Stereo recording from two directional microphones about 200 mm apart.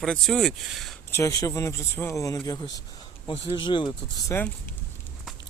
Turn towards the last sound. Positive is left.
turn(degrees=25)  # may be behind; listen again after turning